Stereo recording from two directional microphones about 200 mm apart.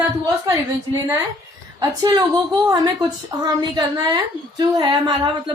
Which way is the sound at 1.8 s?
20° right (ahead or behind).